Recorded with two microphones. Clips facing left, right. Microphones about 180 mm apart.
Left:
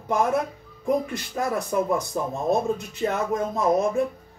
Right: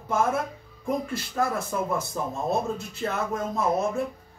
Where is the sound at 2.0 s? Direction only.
15° left (ahead or behind).